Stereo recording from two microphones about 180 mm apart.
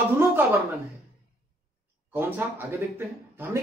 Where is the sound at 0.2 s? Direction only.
15° right (ahead or behind).